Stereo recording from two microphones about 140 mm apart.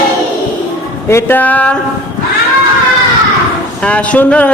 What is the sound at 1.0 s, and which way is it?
Speech, 15° left (ahead or behind).